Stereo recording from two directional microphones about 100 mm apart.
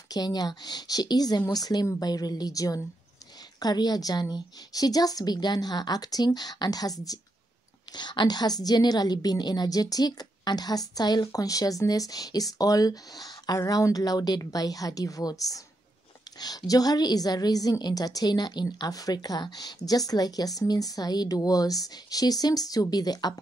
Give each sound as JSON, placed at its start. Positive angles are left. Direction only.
{"t": 0.1, "sound": "a woman's voice", "side_deg": 40}